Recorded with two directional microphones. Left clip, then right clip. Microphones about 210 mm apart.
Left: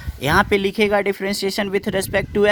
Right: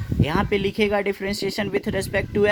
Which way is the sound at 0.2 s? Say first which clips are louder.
Left 6 dB; 45° left (ahead or behind).